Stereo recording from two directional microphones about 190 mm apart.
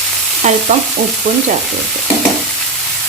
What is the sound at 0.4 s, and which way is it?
Sizzle, 40° right (ahead or behind).